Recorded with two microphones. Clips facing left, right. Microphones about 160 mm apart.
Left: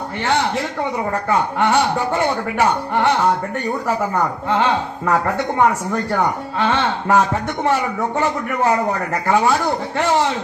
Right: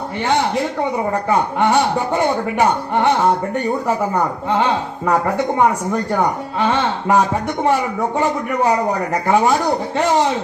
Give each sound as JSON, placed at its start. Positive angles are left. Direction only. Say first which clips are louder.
{"t": 1.3, "sound": "speech", "louder": "right 1 dB", "side_deg": -20}
{"t": 6.6, "sound": "speech", "louder": "right 1 dB", "side_deg": -15}